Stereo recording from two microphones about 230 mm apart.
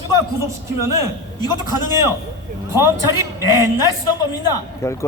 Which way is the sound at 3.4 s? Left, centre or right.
Centre.